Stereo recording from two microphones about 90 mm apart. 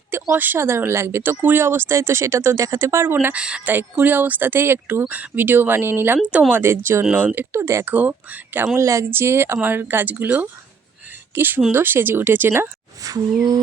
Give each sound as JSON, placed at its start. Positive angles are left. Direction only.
{"t": 0.1, "sound": "speech", "side_deg": -20}
{"t": 3.3, "sound": "speech", "side_deg": -10}
{"t": 7.9, "sound": "speech", "side_deg": -20}
{"t": 8.6, "sound": "speech", "side_deg": -35}
{"t": 13.0, "sound": "a sound", "side_deg": -45}